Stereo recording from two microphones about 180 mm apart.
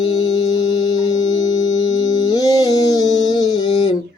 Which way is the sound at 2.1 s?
20° left (ahead or behind).